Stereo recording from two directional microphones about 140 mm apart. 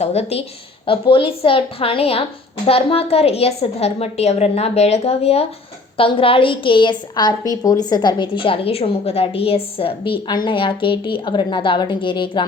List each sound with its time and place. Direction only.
0.0 s a woman's voice: 50° left (ahead or behind)